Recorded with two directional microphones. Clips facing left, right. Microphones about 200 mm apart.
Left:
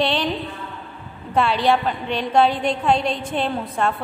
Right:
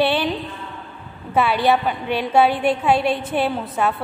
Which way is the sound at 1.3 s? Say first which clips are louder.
Right 1 dB; 5° right (ahead or behind).